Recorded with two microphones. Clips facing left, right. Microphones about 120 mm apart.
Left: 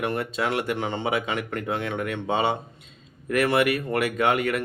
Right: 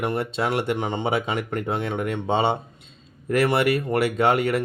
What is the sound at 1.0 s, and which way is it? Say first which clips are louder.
Speech: right 2 dB; 30° right (ahead or behind).